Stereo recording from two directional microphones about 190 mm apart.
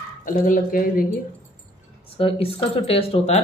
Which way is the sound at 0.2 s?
45° left (ahead or behind).